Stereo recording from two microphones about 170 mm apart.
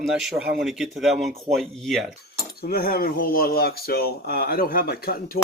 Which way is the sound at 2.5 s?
65° left (ahead or behind).